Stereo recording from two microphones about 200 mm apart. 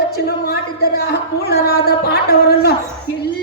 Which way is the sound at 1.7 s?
50° left (ahead or behind).